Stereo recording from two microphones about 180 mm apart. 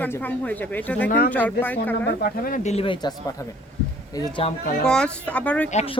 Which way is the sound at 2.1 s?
55° left (ahead or behind).